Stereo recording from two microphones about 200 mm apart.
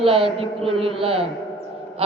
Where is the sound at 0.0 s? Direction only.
30° right (ahead or behind).